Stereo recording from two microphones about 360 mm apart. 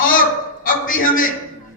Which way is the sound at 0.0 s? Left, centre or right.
Left.